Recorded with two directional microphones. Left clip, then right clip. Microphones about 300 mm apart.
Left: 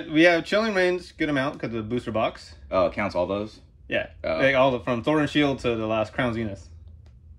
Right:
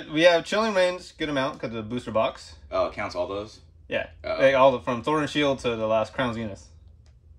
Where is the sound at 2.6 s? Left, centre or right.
Centre.